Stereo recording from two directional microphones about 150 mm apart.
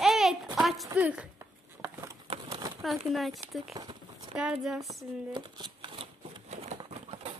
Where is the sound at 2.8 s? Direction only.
Centre (ahead or behind).